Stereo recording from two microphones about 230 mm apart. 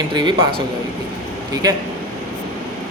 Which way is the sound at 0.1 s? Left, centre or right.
Centre.